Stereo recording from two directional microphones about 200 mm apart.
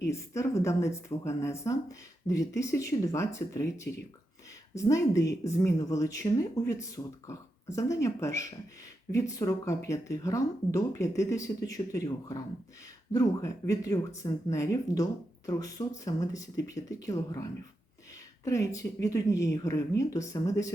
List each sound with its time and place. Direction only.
0.1 s speech: 15° left (ahead or behind)
18.4 s speech: 15° left (ahead or behind)